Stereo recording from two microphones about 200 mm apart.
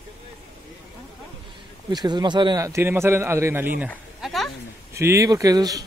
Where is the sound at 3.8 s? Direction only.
Centre (ahead or behind).